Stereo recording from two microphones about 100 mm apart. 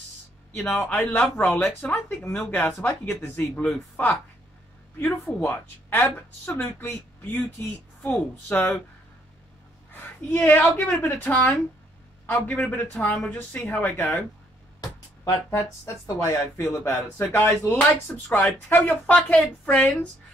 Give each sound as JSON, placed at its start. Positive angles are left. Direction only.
{"t": 0.7, "sound": "speech", "side_deg": 15}
{"t": 9.9, "sound": "speech", "side_deg": 20}
{"t": 15.8, "sound": "speech", "side_deg": 30}